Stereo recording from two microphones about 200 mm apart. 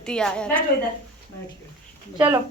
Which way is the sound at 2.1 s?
10° right (ahead or behind).